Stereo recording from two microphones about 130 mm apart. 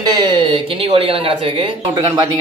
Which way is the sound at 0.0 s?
35° right (ahead or behind).